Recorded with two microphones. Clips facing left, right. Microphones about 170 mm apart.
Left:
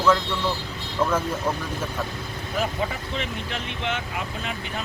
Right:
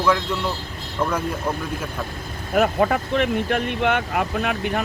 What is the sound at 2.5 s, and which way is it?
Speech, 60° right (ahead or behind).